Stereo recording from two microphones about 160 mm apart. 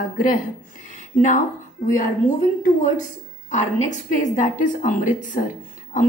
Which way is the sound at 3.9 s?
50° left (ahead or behind).